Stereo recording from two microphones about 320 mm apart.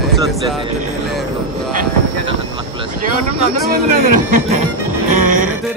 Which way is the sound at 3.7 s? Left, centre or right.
Right.